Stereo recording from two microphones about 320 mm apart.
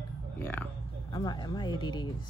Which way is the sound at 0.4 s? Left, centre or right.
Centre.